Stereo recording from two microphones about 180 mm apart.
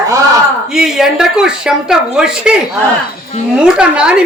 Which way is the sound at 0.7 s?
5° right (ahead or behind).